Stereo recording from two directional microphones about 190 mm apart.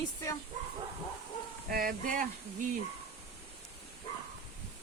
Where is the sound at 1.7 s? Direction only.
50° right (ahead or behind).